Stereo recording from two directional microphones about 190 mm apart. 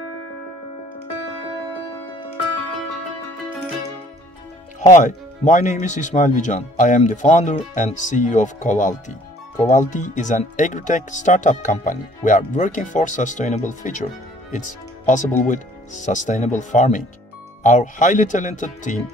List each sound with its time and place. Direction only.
4.7 s speech: 40° left (ahead or behind)